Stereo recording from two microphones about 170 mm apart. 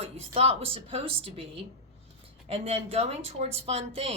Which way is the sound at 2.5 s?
35° right (ahead or behind).